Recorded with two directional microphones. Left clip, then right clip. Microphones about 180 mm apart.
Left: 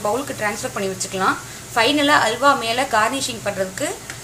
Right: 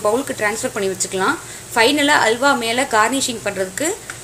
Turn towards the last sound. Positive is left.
turn(degrees=-35)  # may be behind; listen again after turning